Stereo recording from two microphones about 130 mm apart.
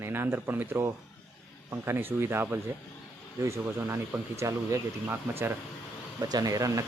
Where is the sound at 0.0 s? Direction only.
20° right (ahead or behind).